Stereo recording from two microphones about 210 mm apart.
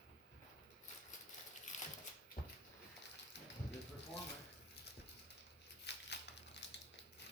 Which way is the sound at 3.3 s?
55° left (ahead or behind).